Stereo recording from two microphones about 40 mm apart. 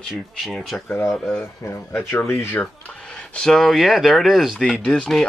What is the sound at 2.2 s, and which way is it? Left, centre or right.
Speech, left.